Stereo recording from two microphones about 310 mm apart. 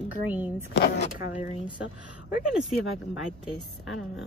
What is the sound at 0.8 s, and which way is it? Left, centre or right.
Speech, left.